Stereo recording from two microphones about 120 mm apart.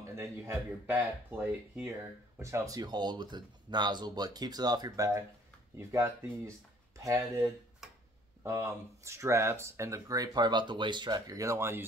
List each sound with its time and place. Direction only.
0.0 s speech: 25° right (ahead or behind)